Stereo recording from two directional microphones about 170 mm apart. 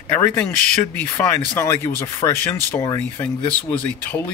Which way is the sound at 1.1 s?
15° left (ahead or behind).